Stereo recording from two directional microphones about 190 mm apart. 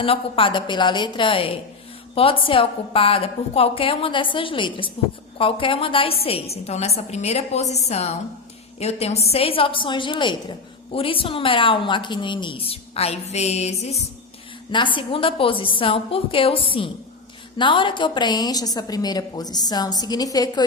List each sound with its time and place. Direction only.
0.0 s a woman's voice: 30° left (ahead or behind)